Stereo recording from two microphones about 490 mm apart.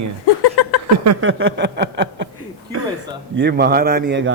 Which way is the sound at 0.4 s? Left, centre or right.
Left.